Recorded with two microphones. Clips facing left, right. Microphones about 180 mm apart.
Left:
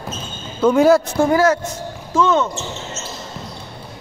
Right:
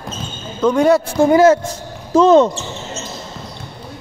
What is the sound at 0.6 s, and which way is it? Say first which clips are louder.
Speech: left 1 dB; 5° left (ahead or behind).